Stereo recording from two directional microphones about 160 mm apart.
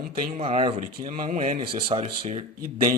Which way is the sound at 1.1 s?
60° right (ahead or behind).